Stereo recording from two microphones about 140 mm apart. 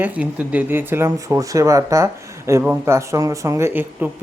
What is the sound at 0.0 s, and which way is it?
Speech, 10° right (ahead or behind).